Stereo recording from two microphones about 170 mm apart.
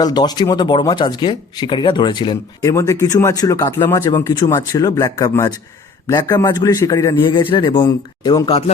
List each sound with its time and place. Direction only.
0.0 s speech: 25° left (ahead or behind)